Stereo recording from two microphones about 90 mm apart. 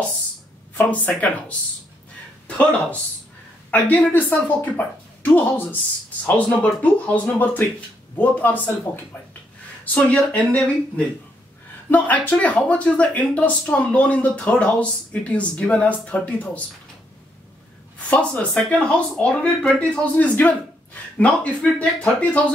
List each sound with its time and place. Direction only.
0.7 s speech: 20° left (ahead or behind)
3.7 s speech: 15° left (ahead or behind)
11.9 s speech: 20° left (ahead or behind)
17.9 s speech: 15° left (ahead or behind)